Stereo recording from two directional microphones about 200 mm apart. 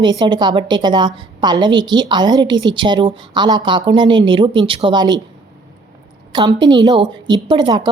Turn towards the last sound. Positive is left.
turn(degrees=-20)  # may be behind; listen again after turning